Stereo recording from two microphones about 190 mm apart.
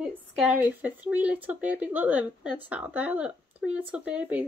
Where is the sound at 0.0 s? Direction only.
5° right (ahead or behind).